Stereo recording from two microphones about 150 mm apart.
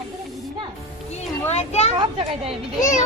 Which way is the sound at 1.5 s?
45° left (ahead or behind).